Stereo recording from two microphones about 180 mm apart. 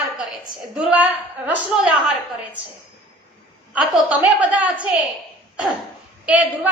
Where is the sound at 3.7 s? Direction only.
5° right (ahead or behind).